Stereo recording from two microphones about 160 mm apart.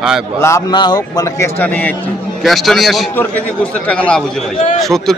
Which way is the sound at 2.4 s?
Centre (ahead or behind).